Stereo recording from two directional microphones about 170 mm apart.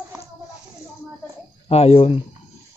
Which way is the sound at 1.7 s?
35° left (ahead or behind).